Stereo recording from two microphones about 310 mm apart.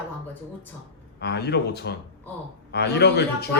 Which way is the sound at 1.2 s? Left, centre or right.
Left.